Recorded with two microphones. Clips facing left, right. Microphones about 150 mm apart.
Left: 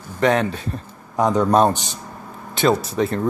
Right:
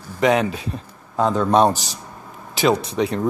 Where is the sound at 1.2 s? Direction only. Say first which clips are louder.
Left 1 dB; 15° left (ahead or behind).